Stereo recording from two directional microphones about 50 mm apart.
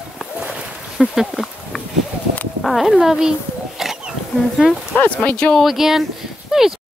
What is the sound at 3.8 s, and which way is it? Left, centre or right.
Wild animals, centre.